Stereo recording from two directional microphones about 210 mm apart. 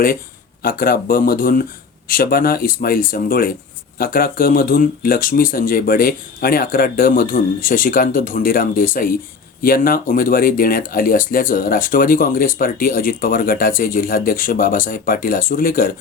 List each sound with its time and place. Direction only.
0.6 s speech: 45° left (ahead or behind)